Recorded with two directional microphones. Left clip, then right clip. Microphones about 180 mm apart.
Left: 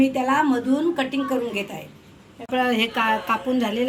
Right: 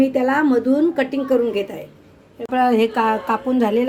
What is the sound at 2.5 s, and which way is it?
A woman's voice, 45° right (ahead or behind).